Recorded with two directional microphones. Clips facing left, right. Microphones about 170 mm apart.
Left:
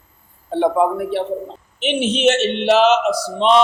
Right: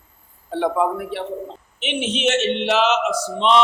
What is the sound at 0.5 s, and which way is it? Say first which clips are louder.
Speech: left 4 dB; 25° left (ahead or behind).